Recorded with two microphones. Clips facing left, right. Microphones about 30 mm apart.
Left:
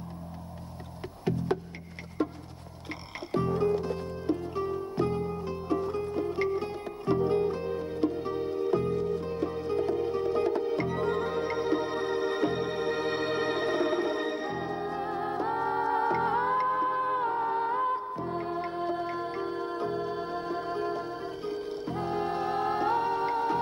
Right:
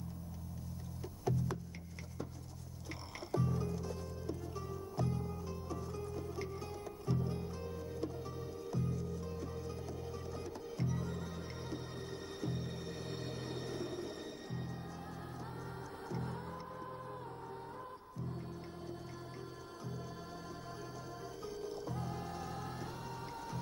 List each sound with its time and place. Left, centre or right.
1.2 s music: left